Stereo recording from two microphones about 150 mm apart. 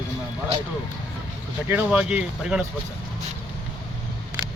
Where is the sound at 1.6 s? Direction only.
10° right (ahead or behind).